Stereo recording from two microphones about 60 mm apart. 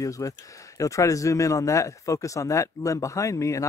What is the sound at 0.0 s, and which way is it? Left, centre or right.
Speech, left.